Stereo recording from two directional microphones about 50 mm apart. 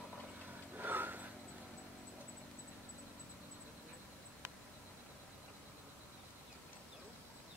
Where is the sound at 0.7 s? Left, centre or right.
Right.